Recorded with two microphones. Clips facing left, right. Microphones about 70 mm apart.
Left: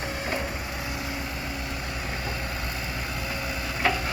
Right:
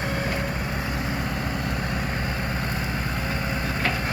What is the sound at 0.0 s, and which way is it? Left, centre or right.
Vehicle, right.